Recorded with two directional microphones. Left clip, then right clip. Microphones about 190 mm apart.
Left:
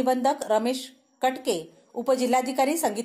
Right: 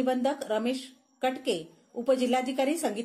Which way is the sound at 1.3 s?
55° left (ahead or behind).